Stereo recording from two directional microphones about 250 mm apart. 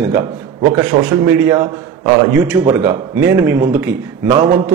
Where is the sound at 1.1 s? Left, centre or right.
Centre.